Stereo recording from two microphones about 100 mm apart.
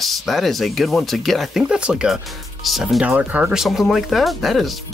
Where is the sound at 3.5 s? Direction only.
5° right (ahead or behind).